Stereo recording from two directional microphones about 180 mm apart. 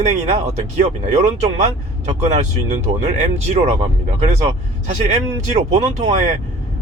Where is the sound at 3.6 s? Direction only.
40° right (ahead or behind).